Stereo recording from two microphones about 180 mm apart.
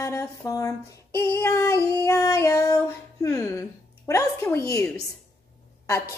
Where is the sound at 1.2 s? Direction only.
15° left (ahead or behind).